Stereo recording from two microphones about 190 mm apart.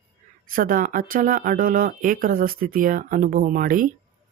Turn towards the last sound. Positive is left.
turn(degrees=-45)  # may be behind; listen again after turning